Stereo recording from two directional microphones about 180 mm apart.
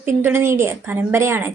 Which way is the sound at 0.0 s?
10° right (ahead or behind).